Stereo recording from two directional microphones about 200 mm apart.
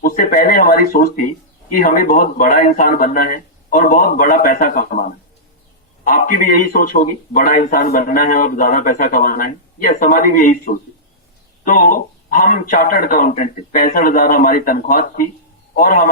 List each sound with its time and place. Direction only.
0.0 s a man's voice: 45° left (ahead or behind)